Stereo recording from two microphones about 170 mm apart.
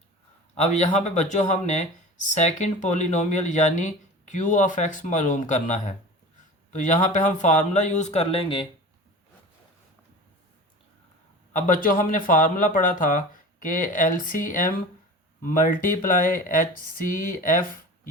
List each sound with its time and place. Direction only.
0.5 s speech: 40° left (ahead or behind)
11.5 s speech: 50° left (ahead or behind)